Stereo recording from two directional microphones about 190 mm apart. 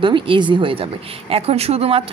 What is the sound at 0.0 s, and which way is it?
A woman's voice, 25° right (ahead or behind).